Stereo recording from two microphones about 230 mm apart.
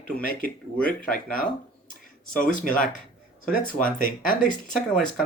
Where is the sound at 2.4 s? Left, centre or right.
Left.